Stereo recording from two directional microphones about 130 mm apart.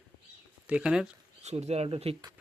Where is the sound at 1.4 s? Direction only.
60° right (ahead or behind).